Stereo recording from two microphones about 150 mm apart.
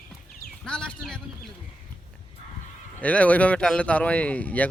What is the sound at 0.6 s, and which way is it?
Speech, 5° left (ahead or behind).